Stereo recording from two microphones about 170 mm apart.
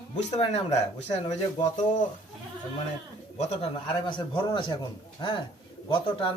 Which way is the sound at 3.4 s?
40° left (ahead or behind).